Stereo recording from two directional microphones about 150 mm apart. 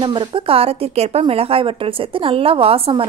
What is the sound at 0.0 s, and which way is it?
A woman's voice, 35° right (ahead or behind).